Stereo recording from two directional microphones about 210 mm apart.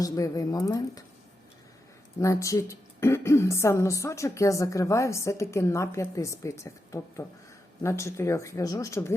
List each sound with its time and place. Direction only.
0.0 s a woman's voice: 15° left (ahead or behind)
2.1 s a woman's voice: 15° left (ahead or behind)